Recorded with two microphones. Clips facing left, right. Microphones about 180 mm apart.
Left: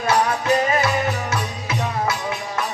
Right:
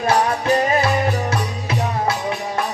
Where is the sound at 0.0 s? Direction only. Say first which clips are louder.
Right 2 dB; 30° right (ahead or behind).